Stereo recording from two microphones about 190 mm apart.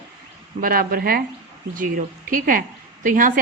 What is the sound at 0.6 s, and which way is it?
A woman's voice, 50° right (ahead or behind).